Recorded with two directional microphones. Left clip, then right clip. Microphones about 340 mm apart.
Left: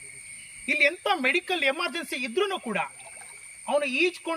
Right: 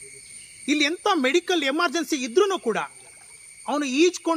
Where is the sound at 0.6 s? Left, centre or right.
Centre.